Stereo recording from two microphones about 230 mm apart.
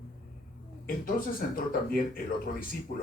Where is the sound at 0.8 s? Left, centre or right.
Left.